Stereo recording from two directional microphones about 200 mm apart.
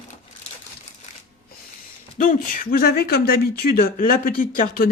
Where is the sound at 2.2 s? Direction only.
40° left (ahead or behind).